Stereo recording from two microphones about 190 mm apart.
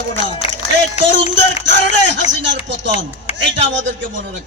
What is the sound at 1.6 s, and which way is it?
A man's voice, 70° right (ahead or behind).